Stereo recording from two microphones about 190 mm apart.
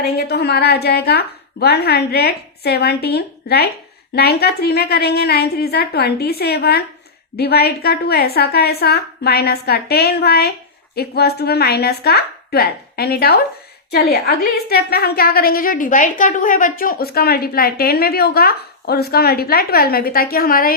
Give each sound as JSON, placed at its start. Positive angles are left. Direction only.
{"t": 0.0, "sound": "a woman's voice", "side_deg": 60}